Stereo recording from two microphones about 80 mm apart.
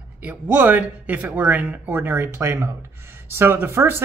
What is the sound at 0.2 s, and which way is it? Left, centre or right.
Speech, right.